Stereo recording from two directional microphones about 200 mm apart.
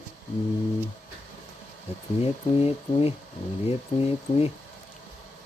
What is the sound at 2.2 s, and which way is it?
Speech, 30° left (ahead or behind).